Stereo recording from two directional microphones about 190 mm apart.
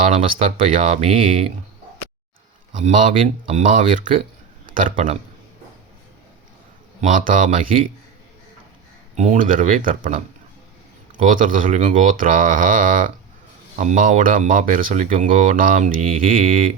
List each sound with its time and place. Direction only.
0.2 s speech: 30° right (ahead or behind)
2.7 s speech: 40° right (ahead or behind)
3.1 s speech: 30° right (ahead or behind)
7.0 s speech: 45° right (ahead or behind)
9.1 s speech: 40° right (ahead or behind)